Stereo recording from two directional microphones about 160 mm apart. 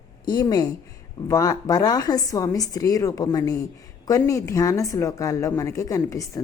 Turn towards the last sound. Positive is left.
turn(degrees=20)  # may be behind; listen again after turning